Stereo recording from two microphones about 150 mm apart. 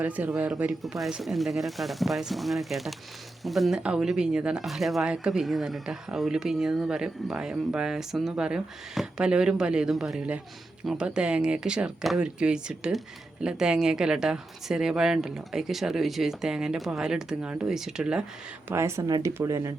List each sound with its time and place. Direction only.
0.0 s speech: 10° right (ahead or behind)
18.7 s speech: 15° right (ahead or behind)